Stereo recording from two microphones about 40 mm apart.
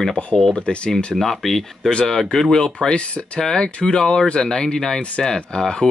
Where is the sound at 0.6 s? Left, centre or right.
Left.